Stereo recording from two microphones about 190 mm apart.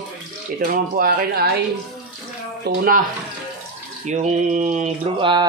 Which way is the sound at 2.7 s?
55° right (ahead or behind).